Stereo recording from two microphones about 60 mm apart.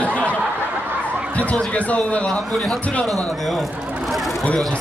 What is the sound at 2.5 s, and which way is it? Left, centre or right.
Speech, centre.